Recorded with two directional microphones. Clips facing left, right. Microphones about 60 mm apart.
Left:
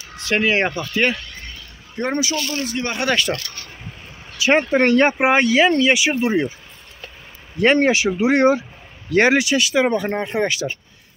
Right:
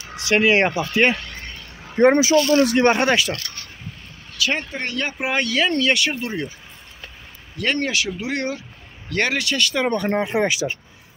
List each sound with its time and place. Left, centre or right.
0.1 s speech: centre
1.2 s a sound: right
2.5 s speech: right
3.3 s speech: centre
4.6 s speech: left
7.5 s speech: left; by 10.3 s centre
10.3 s speech: centre